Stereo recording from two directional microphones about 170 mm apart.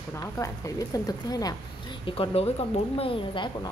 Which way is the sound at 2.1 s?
35° left (ahead or behind).